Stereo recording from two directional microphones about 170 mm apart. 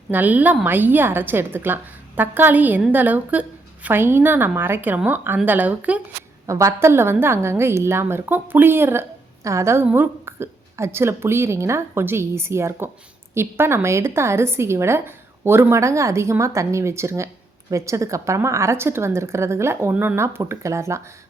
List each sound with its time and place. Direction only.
0.1 s a woman's voice: 10° right (ahead or behind)